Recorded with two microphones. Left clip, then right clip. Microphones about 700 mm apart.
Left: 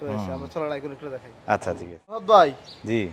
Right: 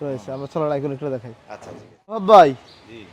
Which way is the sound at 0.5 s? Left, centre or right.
Right.